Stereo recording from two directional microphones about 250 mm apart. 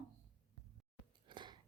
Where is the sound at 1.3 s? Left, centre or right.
Centre.